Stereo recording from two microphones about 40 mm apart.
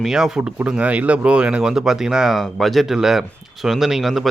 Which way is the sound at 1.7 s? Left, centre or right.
Centre.